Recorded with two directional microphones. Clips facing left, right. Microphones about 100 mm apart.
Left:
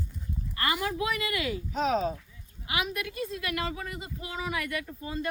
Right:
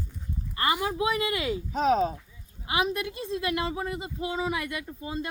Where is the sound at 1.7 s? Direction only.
40° right (ahead or behind).